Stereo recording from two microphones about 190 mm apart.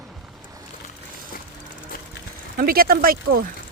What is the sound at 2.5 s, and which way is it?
Speech, 50° right (ahead or behind).